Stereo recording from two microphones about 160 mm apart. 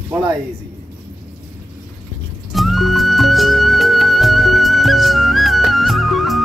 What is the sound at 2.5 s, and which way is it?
Music, centre (ahead or behind).